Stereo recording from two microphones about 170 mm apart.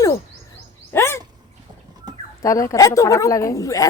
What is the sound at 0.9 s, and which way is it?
Dog, 15° left (ahead or behind).